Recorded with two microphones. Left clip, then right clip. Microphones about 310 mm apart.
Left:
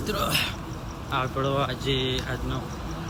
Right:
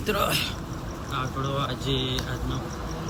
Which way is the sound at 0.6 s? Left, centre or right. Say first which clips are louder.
Right 1 dB; centre.